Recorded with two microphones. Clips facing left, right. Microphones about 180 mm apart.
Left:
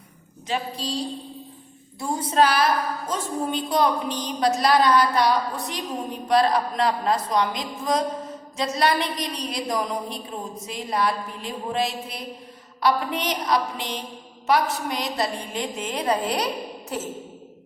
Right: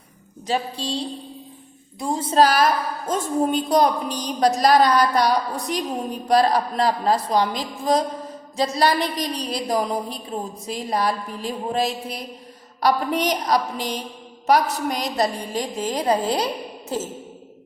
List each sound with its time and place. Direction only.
0.4 s a woman's voice: 30° right (ahead or behind)